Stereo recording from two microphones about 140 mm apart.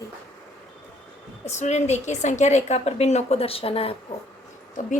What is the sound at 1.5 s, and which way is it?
A woman's voice, 55° left (ahead or behind).